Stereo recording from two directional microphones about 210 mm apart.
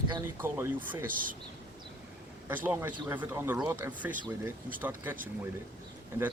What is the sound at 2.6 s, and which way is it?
Speech, 10° right (ahead or behind).